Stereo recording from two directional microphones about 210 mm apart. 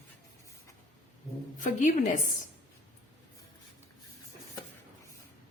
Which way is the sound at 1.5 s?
40° left (ahead or behind).